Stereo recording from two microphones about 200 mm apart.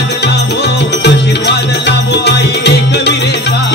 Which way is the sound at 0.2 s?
55° left (ahead or behind).